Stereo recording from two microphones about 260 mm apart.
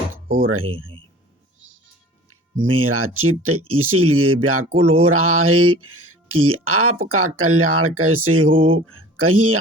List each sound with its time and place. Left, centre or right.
0.3 s speech: right
2.8 s speech: right